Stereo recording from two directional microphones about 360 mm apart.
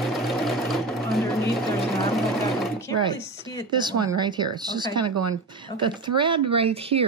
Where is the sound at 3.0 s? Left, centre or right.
Centre.